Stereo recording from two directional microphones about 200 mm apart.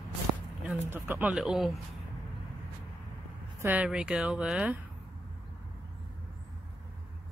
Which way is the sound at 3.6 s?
5° right (ahead or behind).